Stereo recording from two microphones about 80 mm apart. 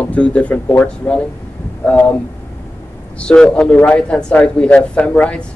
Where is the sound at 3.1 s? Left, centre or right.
Centre.